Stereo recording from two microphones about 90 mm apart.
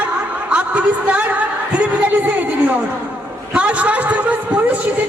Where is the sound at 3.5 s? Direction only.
15° right (ahead or behind).